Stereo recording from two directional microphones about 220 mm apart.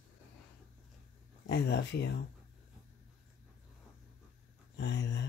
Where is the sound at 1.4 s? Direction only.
50° left (ahead or behind).